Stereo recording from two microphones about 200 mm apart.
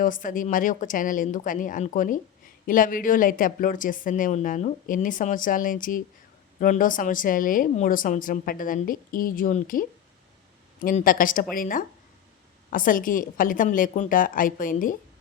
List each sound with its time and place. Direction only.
0.0 s a woman's voice: 40° left (ahead or behind)